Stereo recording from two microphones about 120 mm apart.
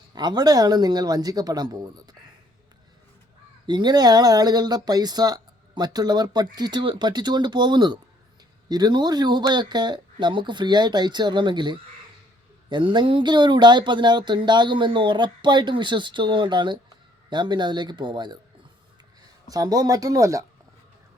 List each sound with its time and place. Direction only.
0.1 s speech: 35° right (ahead or behind)
3.7 s speech: 35° right (ahead or behind)
19.5 s speech: 30° right (ahead or behind)